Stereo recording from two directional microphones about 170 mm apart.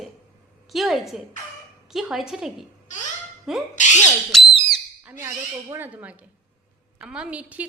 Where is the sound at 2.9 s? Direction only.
45° left (ahead or behind).